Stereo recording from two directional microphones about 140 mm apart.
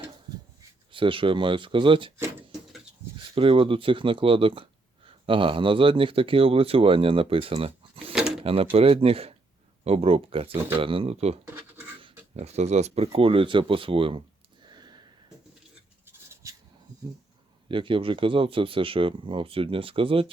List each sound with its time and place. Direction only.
0.9 s speech: 40° right (ahead or behind)
3.3 s speech: 40° right (ahead or behind)
12.4 s speech: 50° right (ahead or behind)
14.7 s a sound: 30° right (ahead or behind)
16.4 s a sound: 25° right (ahead or behind)
17.7 s speech: 40° right (ahead or behind)